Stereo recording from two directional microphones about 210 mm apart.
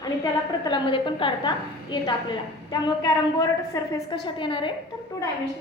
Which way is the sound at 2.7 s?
20° left (ahead or behind).